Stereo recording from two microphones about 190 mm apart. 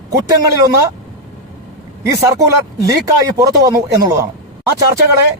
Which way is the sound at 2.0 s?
20° right (ahead or behind).